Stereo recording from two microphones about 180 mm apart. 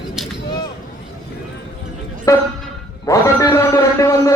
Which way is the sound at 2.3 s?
15° left (ahead or behind).